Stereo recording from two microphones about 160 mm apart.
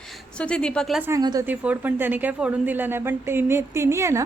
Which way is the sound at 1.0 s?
20° right (ahead or behind).